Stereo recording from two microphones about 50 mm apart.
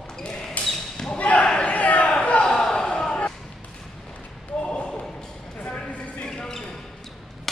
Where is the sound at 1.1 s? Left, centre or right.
Left.